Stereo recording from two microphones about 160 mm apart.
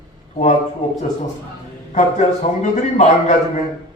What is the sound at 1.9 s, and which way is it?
A man's voice, 45° left (ahead or behind).